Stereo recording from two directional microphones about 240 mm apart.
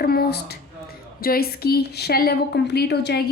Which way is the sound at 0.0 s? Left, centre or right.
Left.